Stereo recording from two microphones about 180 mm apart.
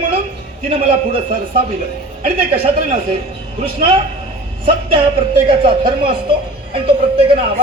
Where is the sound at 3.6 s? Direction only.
30° right (ahead or behind).